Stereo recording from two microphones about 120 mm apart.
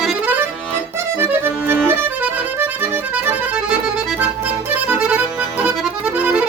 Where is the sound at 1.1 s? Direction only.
20° right (ahead or behind).